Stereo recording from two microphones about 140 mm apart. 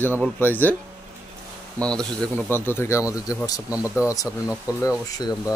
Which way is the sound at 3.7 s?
10° right (ahead or behind).